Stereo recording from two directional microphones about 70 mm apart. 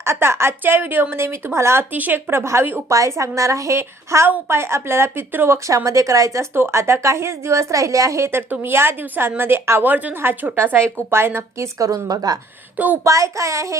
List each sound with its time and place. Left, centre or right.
0.0 s a woman's voice: right
2.9 s a woman's voice: right
5.6 s a woman's voice: right
11.8 s a woman's voice: right
12.7 s a woman's voice: right
13.1 s a woman's voice: right